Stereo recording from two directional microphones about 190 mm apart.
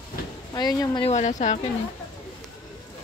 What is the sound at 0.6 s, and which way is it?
Speech, 20° left (ahead or behind).